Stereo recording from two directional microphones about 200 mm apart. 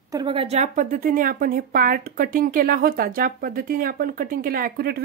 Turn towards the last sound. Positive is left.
turn(degrees=-50)  # may be behind; listen again after turning